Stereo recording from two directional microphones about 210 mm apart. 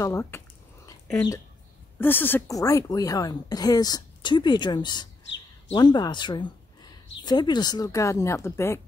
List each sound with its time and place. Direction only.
0.0 s speech: 10° left (ahead or behind)